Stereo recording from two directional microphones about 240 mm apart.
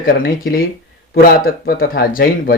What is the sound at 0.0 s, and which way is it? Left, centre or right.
Speech, left.